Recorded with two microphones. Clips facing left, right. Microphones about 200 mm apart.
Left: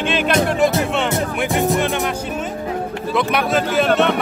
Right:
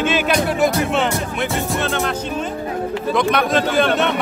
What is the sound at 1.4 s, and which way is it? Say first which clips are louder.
Speech: left 3 dB; 15° left (ahead or behind).